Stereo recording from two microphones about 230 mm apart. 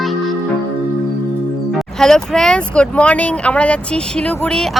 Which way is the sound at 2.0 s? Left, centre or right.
Centre.